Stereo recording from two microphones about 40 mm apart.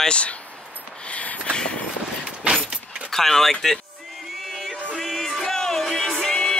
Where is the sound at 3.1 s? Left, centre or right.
Centre.